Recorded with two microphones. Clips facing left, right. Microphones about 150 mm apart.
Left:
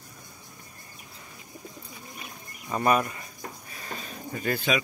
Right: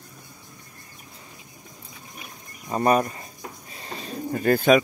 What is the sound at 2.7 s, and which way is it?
Speech, 35° right (ahead or behind).